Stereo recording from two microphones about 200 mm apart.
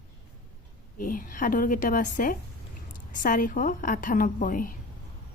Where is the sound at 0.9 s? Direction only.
45° left (ahead or behind).